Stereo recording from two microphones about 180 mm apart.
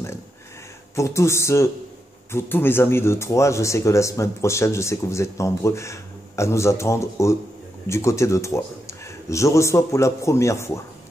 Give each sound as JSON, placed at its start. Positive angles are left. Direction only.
{"t": 0.9, "sound": "speech", "side_deg": 15}